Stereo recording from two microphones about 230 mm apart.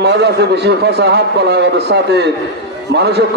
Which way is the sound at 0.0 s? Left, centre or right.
Right.